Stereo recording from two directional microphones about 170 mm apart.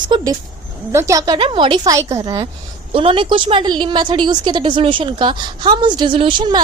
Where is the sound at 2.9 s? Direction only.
30° right (ahead or behind).